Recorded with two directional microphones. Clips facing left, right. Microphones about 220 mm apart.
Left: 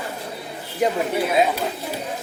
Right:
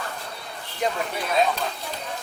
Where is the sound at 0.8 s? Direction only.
10° left (ahead or behind).